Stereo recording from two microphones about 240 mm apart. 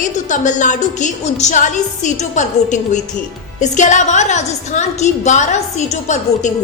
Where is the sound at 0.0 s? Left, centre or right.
Left.